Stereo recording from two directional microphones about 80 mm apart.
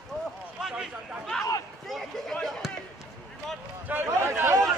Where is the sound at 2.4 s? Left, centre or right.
Centre.